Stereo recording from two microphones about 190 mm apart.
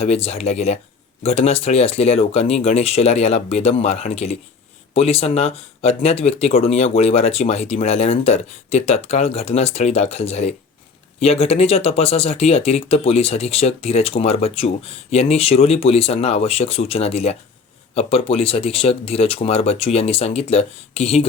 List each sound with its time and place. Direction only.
0.0 s speech: 35° left (ahead or behind)